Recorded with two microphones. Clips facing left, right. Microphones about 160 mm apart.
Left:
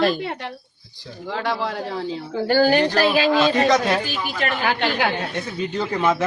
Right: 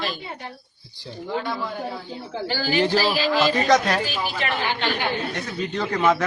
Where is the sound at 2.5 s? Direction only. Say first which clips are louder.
Left 5 dB; 50° left (ahead or behind).